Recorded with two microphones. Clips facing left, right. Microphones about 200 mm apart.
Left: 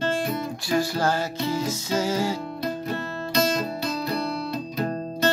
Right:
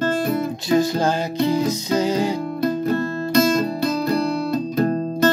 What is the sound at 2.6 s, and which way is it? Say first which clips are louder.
Music: right 8 dB; 50° right (ahead or behind).